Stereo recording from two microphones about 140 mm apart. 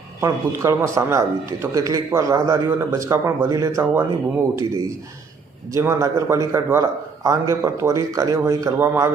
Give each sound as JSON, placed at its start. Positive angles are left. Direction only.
{"t": 0.2, "sound": "a man's voice", "side_deg": -20}